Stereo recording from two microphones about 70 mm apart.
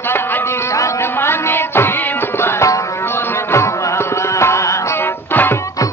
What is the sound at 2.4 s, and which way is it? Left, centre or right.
Music, left.